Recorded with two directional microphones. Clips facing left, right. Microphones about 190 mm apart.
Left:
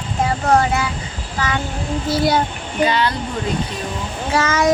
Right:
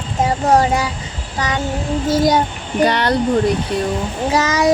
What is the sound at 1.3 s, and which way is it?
Speech, 20° right (ahead or behind).